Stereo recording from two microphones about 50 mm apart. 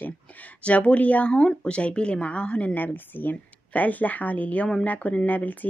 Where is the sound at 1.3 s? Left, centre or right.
Centre.